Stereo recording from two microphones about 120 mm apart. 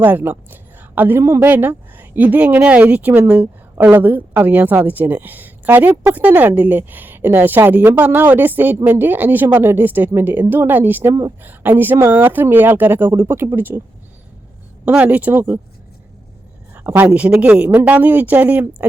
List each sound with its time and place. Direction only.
0.0 s a woman's voice: 15° right (ahead or behind)
14.8 s a woman's voice: 10° right (ahead or behind)
16.7 s a woman's voice: 15° right (ahead or behind)